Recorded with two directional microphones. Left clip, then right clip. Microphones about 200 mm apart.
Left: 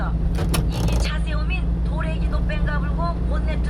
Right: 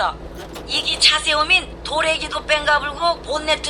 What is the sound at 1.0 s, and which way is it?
A woman's voice, 55° right (ahead or behind).